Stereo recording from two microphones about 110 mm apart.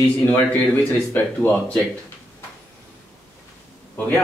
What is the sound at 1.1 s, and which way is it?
Speech, 15° left (ahead or behind).